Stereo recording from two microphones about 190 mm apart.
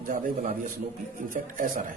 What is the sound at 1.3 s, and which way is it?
Speech, 45° right (ahead or behind).